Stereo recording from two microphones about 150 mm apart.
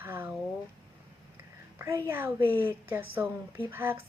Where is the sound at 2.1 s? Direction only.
15° right (ahead or behind).